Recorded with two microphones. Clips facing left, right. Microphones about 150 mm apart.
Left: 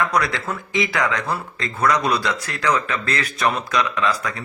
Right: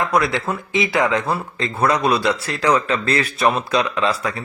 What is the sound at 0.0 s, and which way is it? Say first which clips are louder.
Speech: right 3 dB; 25° right (ahead or behind).